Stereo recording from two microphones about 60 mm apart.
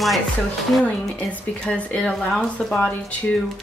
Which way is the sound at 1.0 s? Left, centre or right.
Centre.